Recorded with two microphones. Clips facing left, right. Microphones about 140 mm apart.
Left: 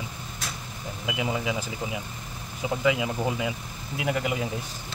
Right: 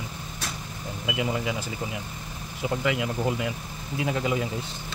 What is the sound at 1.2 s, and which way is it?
Speech, 10° left (ahead or behind).